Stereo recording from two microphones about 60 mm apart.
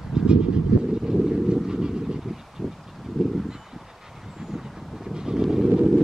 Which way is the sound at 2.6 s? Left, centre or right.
Centre.